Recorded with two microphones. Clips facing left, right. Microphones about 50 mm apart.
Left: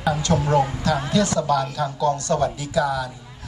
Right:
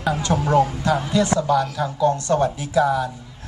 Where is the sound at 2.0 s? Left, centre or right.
Right.